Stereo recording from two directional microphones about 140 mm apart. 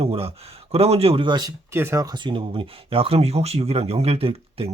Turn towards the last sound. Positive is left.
turn(degrees=-45)  # may be behind; listen again after turning